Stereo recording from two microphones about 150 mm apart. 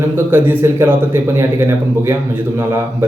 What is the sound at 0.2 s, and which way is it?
Speech, 15° right (ahead or behind).